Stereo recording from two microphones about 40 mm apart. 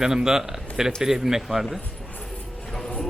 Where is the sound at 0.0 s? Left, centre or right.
Centre.